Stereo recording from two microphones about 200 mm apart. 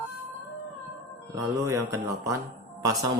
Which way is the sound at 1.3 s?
15° right (ahead or behind).